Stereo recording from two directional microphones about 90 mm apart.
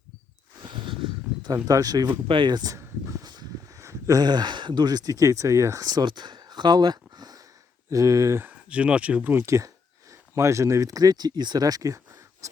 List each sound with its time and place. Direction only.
0.6 s a sound: 65° right (ahead or behind)
1.6 s speech: 40° right (ahead or behind)
2.2 s speech: 65° right (ahead or behind); by 2.7 s 50° right (ahead or behind)
2.7 s a sound: 35° right (ahead or behind)
3.8 s speech: 35° right (ahead or behind)
6.1 s a sound: 55° right (ahead or behind)
7.9 s speech: 35° right (ahead or behind)
8.4 s speech: 15° right (ahead or behind)
9.5 s speech: 40° right (ahead or behind)